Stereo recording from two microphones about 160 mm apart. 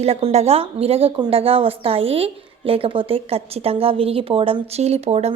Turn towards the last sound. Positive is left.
turn(degrees=-40)  # may be behind; listen again after turning